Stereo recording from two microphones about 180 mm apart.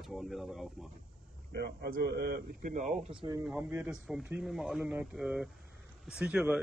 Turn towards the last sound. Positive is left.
turn(degrees=-5)  # may be behind; listen again after turning